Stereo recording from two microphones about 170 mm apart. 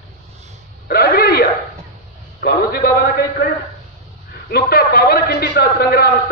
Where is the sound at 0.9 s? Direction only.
65° left (ahead or behind).